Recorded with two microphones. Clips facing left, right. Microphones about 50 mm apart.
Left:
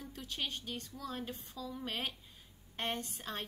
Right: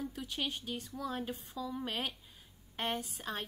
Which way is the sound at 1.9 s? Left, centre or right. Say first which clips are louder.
Right 2 dB; centre.